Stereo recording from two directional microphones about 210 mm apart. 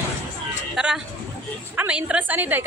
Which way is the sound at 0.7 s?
5° right (ahead or behind).